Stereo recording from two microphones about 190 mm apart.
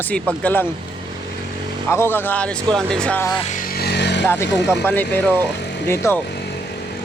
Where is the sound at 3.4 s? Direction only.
45° left (ahead or behind); by 4.2 s 60° left (ahead or behind).